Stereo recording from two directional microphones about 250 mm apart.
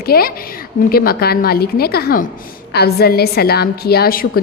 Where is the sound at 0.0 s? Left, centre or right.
Left.